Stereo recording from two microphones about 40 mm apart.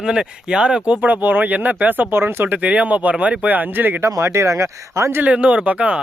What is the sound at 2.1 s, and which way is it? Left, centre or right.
Speech, right.